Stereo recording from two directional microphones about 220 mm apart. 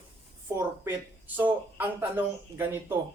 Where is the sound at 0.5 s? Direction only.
10° right (ahead or behind).